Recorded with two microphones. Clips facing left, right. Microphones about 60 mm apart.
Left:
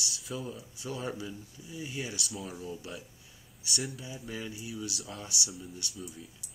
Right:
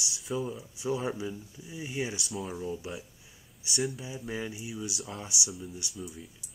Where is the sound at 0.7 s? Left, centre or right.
Centre.